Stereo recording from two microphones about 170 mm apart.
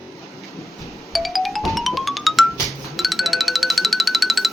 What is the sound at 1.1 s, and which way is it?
Music, centre (ahead or behind).